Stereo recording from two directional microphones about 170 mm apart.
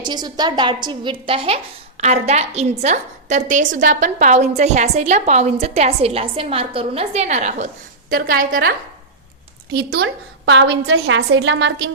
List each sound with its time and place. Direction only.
0.0 s a woman's voice: 25° right (ahead or behind); by 7.7 s 45° right (ahead or behind)
8.1 s a woman's voice: 55° right (ahead or behind)
9.7 s a woman's voice: 80° right